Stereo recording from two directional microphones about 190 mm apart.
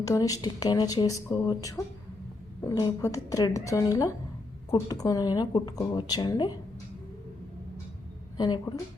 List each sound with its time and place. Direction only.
0.0 s a woman's voice: 20° left (ahead or behind)
8.4 s speech: 25° left (ahead or behind)